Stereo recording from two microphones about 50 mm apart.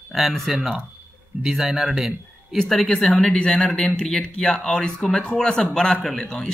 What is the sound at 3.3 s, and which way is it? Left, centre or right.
A man's voice, centre.